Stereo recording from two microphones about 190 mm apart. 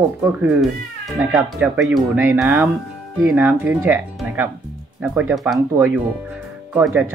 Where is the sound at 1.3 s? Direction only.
5° right (ahead or behind).